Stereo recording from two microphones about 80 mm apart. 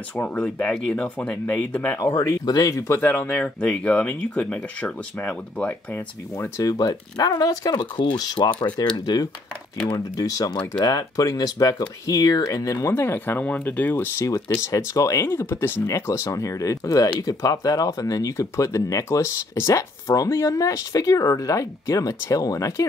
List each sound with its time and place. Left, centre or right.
0.2 s speech: centre
2.0 s speech: left
3.0 s speech: left
6.6 s speech: left
8.9 s speech: left
12.4 s speech: left
12.9 s speech: left
14.3 s speech: left